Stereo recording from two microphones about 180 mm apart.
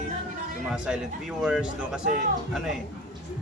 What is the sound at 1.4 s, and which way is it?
Speech, 5° right (ahead or behind).